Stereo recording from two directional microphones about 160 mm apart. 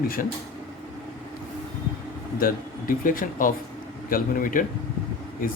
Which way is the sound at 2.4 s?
60° left (ahead or behind).